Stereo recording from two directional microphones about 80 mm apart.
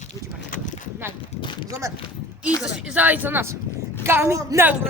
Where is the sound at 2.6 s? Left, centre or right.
Centre.